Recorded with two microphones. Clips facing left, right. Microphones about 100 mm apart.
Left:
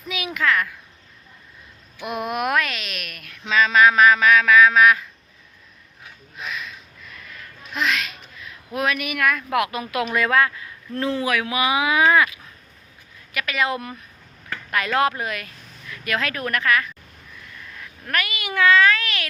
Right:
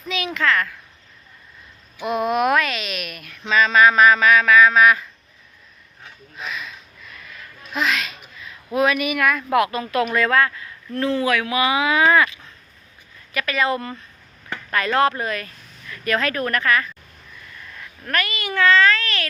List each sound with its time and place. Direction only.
0.1 s speech: 10° left (ahead or behind)
2.0 s speech: 5° left (ahead or behind)
6.0 s a sound: centre (ahead or behind)
7.6 s speech: centre (ahead or behind)
9.7 s speech: 10° left (ahead or behind)